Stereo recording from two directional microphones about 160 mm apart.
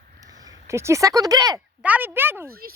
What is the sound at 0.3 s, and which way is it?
Speech, 20° right (ahead or behind).